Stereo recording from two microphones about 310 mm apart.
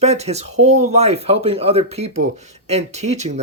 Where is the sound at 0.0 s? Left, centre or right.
Right.